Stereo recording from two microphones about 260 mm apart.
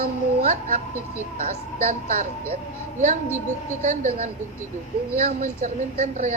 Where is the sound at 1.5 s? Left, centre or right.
Right.